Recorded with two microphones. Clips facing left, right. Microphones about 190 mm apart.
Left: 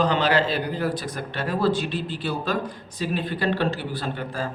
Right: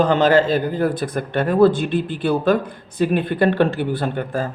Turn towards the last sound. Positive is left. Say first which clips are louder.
# right 6 dB
turn(degrees=-50)  # may be behind; listen again after turning